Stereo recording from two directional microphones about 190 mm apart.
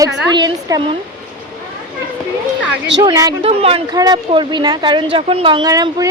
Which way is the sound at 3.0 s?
20° right (ahead or behind).